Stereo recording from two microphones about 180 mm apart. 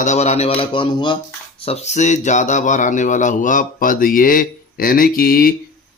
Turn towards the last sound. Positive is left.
turn(degrees=55)  # may be behind; listen again after turning